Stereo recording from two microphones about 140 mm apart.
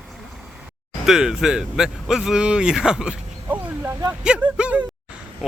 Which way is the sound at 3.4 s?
10° right (ahead or behind).